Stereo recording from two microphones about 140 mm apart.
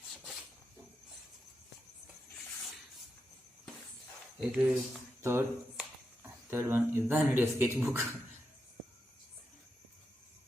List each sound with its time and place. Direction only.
4.4 s speech: 10° right (ahead or behind)
5.2 s speech: 20° right (ahead or behind)